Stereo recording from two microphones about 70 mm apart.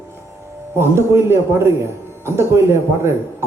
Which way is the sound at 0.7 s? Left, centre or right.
Right.